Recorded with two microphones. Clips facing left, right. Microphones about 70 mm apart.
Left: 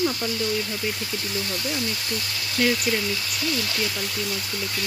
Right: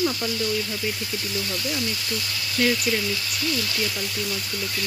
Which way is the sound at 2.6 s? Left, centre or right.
Centre.